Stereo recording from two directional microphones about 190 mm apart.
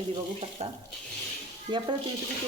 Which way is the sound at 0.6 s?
30° right (ahead or behind).